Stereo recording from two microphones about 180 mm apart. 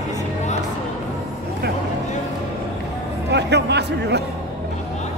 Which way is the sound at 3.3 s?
70° right (ahead or behind).